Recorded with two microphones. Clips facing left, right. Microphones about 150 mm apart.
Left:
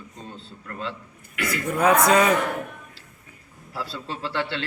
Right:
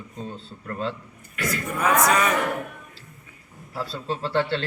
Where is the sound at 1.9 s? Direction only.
30° left (ahead or behind).